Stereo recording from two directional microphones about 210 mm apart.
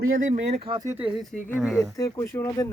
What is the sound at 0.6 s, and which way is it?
Speech, 20° right (ahead or behind).